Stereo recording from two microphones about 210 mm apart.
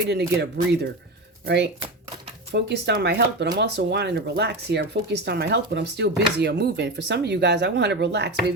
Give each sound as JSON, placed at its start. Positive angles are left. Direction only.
{"t": 0.0, "sound": "speech", "side_deg": -55}
{"t": 2.5, "sound": "speech", "side_deg": -55}